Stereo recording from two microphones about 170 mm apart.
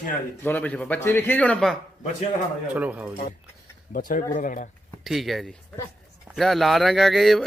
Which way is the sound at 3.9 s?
55° left (ahead or behind).